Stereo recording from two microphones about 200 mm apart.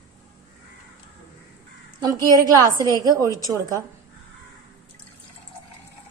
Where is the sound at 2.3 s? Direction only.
20° right (ahead or behind).